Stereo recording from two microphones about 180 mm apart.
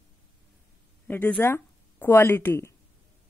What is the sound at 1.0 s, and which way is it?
Speech, 10° left (ahead or behind).